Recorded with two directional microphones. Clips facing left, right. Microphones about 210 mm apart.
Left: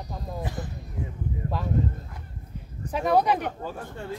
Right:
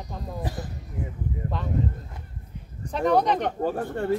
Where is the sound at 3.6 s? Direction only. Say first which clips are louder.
Right 9 dB; 60° right (ahead or behind).